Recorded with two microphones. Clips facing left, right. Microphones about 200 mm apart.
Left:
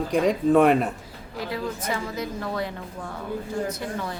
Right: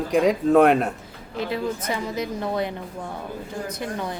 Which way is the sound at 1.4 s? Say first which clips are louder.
Right 4 dB; 25° right (ahead or behind).